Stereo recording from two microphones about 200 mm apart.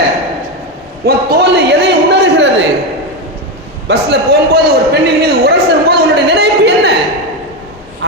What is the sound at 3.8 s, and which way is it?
Speech, 55° right (ahead or behind).